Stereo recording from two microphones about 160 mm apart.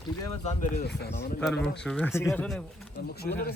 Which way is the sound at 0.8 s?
90° left.